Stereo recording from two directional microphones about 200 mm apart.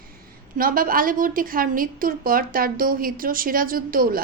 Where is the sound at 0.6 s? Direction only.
45° right (ahead or behind).